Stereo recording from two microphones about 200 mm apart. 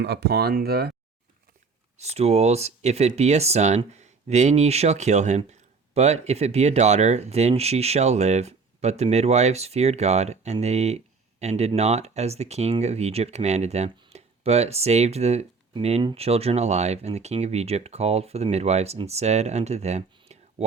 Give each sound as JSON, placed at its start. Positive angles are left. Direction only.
{"t": 0.0, "sound": "speech", "side_deg": -55}
{"t": 2.0, "sound": "speech", "side_deg": -30}